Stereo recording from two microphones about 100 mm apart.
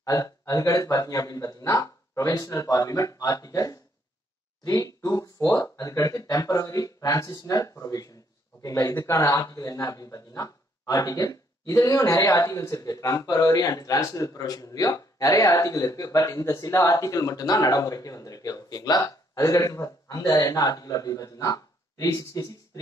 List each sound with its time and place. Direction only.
0.0 s speech: 35° left (ahead or behind)